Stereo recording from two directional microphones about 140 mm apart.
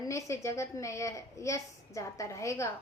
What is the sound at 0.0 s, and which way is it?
Speech, 20° left (ahead or behind).